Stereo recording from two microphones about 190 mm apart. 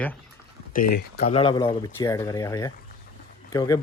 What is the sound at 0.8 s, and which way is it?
Speech, 55° left (ahead or behind).